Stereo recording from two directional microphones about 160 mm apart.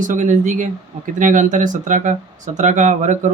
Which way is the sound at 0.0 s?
50° right (ahead or behind).